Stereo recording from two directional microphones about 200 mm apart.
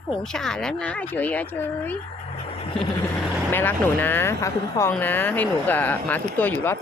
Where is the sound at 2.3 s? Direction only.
30° left (ahead or behind).